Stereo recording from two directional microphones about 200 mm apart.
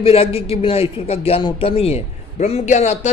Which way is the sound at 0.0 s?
30° left (ahead or behind).